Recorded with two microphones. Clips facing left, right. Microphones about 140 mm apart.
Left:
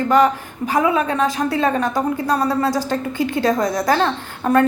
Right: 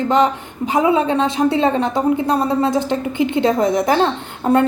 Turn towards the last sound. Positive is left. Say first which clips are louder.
# right 1 dB
turn(degrees=-25)  # may be behind; listen again after turning